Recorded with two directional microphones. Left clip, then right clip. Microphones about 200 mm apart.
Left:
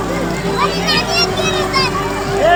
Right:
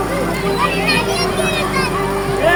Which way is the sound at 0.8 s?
25° left (ahead or behind).